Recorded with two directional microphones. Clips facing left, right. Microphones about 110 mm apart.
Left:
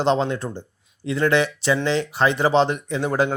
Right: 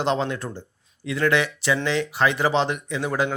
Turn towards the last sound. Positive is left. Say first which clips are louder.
# left 3 dB
turn(degrees=35)  # may be behind; listen again after turning